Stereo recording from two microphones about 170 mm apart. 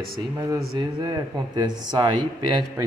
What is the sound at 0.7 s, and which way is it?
Speech, 25° right (ahead or behind).